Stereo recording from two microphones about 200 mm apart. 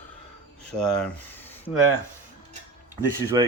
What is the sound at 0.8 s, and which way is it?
Speech, 5° left (ahead or behind).